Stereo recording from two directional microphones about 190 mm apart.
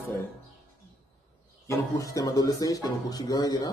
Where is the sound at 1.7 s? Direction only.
15° left (ahead or behind).